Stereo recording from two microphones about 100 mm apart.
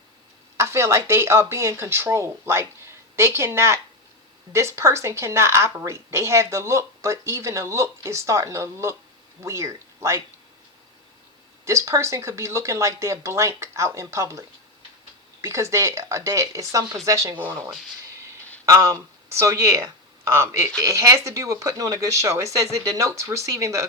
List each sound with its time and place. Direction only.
0.5 s a woman's voice: 30° right (ahead or behind)
11.6 s a woman's voice: 30° right (ahead or behind)
18.6 s speech: 30° right (ahead or behind)